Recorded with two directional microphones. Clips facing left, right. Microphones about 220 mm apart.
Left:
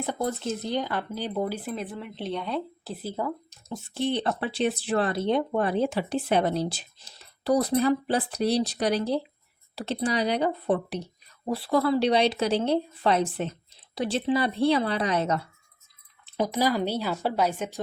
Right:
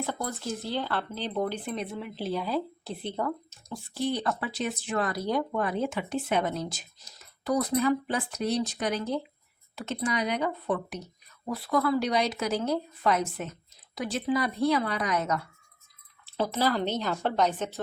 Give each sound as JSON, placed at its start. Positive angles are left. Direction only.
{"t": 0.0, "sound": "speech", "side_deg": 20}
{"t": 3.7, "sound": "speech", "side_deg": 25}
{"t": 16.2, "sound": "speech", "side_deg": 15}